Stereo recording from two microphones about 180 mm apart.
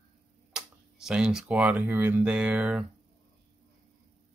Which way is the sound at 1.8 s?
15° right (ahead or behind).